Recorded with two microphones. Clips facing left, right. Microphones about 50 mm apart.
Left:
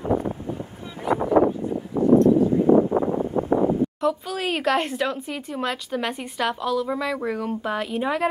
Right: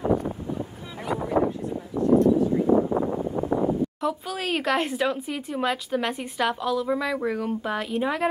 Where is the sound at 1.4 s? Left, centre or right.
Left.